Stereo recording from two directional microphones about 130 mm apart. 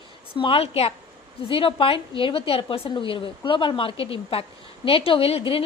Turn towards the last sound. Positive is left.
turn(degrees=45)  # may be behind; listen again after turning